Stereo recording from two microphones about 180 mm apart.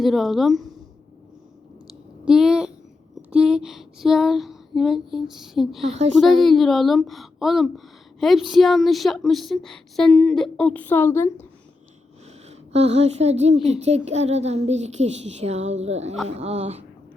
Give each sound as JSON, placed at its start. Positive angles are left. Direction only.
{"t": 0.0, "sound": "speech", "side_deg": 0}
{"t": 1.9, "sound": "a sound", "side_deg": -5}
{"t": 3.2, "sound": "speech", "side_deg": -5}
{"t": 5.9, "sound": "a woman's voice", "side_deg": -40}
{"t": 6.1, "sound": "speech", "side_deg": 0}
{"t": 12.5, "sound": "a woman's voice", "side_deg": -35}